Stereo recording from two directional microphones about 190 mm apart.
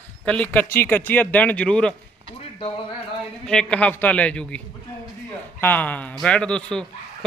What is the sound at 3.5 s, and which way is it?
A man's voice, 5° left (ahead or behind).